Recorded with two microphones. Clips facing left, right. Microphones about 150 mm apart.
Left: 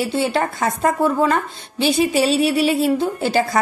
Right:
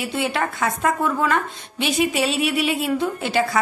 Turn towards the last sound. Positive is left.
turn(degrees=35)  # may be behind; listen again after turning